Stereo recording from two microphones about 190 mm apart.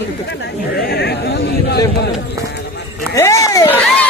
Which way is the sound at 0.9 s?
60° left (ahead or behind).